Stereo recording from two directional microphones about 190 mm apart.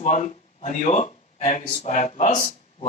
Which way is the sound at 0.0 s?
40° left (ahead or behind).